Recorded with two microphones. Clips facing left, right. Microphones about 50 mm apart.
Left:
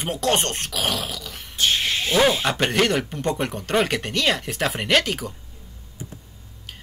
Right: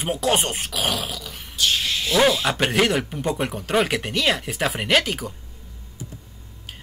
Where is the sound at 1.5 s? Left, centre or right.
Left.